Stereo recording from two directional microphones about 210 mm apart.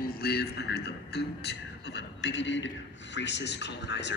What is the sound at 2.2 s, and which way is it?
A man's voice, 60° left (ahead or behind).